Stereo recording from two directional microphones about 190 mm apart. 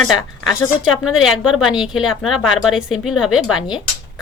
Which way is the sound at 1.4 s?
5° right (ahead or behind).